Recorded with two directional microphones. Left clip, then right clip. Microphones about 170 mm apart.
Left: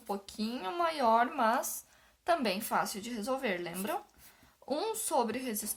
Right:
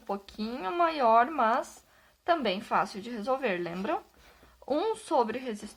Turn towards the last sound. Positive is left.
turn(degrees=-20)  # may be behind; listen again after turning